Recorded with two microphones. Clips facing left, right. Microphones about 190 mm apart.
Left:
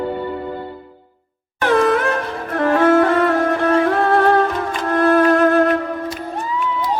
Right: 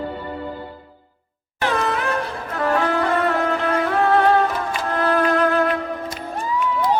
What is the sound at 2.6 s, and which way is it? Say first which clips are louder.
Music: left 7 dB; 45° left (ahead or behind).